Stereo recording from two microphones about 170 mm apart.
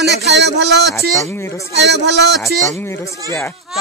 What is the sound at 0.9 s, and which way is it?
Speech, centre (ahead or behind).